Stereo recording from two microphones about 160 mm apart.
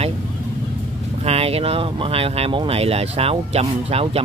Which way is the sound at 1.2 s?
40° right (ahead or behind).